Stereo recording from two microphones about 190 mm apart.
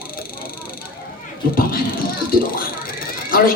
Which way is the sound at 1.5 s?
50° left (ahead or behind).